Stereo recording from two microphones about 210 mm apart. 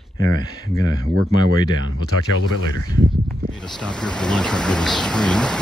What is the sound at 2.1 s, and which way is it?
Speech, 90° left.